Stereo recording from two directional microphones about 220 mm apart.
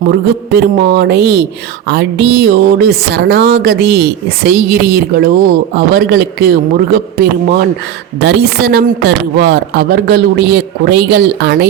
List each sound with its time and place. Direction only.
0.0 s speech: 50° right (ahead or behind)